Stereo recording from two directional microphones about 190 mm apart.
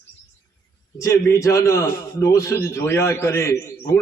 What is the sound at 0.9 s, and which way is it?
A man's voice, 15° left (ahead or behind).